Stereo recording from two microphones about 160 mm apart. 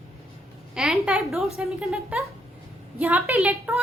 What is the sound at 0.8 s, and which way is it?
A woman's voice, 5° right (ahead or behind).